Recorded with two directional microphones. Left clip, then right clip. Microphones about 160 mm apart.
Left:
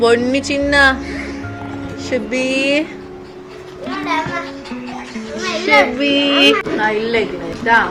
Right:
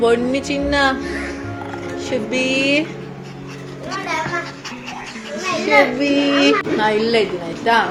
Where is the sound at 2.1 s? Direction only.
10° left (ahead or behind).